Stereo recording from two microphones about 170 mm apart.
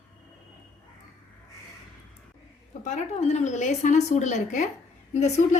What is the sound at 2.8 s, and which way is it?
A woman's voice, 40° left (ahead or behind).